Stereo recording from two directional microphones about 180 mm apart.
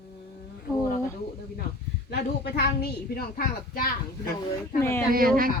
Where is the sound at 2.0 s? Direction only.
60° left (ahead or behind).